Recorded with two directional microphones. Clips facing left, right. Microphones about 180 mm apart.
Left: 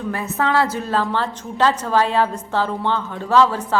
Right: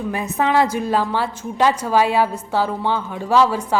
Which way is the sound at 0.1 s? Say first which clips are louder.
Right 1 dB; 15° right (ahead or behind).